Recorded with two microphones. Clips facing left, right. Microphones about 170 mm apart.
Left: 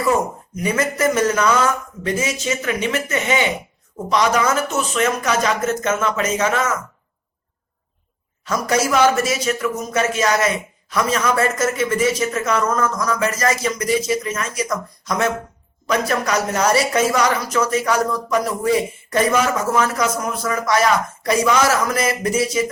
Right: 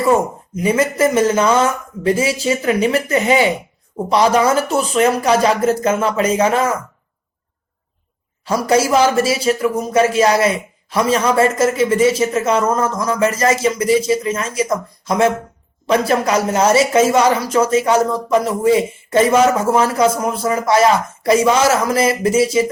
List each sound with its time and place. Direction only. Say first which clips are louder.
0.0 s speech: right 4 dB; 25° right (ahead or behind)
8.4 s speech: right 5 dB; 30° right (ahead or behind)